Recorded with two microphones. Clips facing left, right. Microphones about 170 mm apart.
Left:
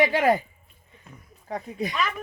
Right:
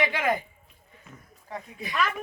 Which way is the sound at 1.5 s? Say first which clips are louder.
Left 8 dB; 45° left (ahead or behind).